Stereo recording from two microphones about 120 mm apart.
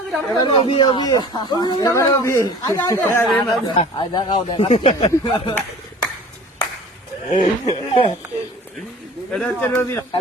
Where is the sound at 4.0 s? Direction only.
40° left (ahead or behind).